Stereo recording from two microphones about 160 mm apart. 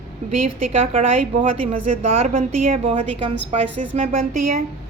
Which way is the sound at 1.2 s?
55° right (ahead or behind).